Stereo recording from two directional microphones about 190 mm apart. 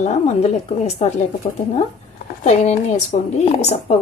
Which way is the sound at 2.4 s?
35° left (ahead or behind).